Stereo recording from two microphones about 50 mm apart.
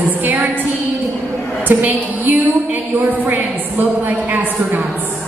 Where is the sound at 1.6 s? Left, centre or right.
Right.